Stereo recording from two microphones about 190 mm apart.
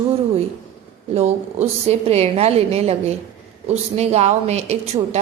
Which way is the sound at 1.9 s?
35° right (ahead or behind).